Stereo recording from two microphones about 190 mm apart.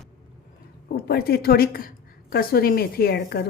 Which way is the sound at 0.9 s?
55° left (ahead or behind).